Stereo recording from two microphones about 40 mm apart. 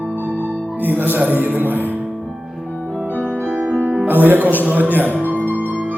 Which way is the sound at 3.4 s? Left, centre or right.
Right.